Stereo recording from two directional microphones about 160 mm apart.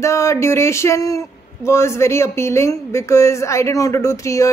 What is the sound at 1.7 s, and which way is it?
Speech, 15° left (ahead or behind).